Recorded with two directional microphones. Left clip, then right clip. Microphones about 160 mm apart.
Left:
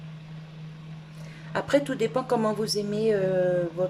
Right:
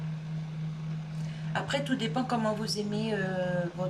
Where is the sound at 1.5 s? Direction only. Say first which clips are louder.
Left 7 dB; 50° left (ahead or behind).